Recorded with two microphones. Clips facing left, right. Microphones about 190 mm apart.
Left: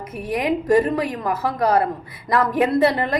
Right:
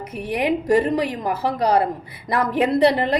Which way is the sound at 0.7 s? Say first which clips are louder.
Left 2 dB; 20° right (ahead or behind).